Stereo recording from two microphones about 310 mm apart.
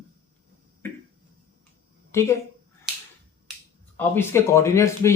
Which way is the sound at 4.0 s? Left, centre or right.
Centre.